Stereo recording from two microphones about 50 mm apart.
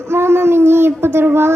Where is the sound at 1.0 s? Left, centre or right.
Right.